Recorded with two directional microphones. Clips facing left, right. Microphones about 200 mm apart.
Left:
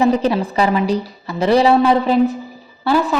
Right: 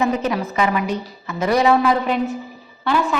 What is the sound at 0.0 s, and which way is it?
A woman's voice, 35° left (ahead or behind).